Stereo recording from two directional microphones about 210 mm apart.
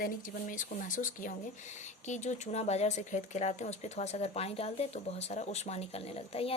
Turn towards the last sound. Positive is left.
turn(degrees=30)  # may be behind; listen again after turning